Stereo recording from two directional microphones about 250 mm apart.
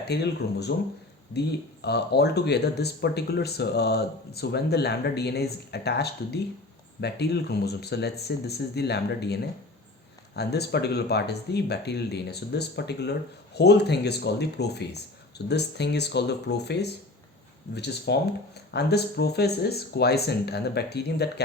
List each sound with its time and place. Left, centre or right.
0.0 s speech: left